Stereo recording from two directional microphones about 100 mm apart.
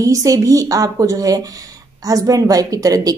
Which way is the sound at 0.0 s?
35° right (ahead or behind).